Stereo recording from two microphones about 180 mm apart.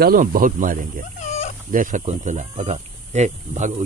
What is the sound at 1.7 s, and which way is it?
Speech, 45° right (ahead or behind).